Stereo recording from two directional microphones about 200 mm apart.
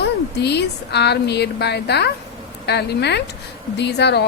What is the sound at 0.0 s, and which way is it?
A woman's voice, 55° left (ahead or behind).